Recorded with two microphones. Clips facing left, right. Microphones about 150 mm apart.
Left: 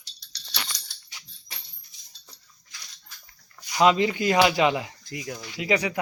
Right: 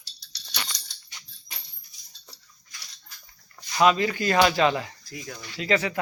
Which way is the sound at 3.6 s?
15° left (ahead or behind).